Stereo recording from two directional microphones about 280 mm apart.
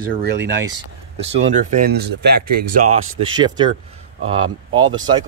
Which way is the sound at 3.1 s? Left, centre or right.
Centre.